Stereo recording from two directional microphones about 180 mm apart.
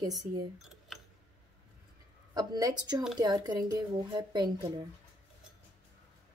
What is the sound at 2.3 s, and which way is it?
A woman's voice, 20° right (ahead or behind).